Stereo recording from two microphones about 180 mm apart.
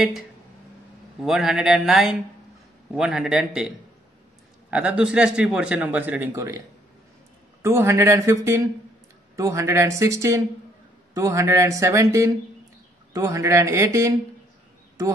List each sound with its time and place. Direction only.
1.2 s a man's voice: centre (ahead or behind)
7.6 s a man's voice: 15° right (ahead or behind)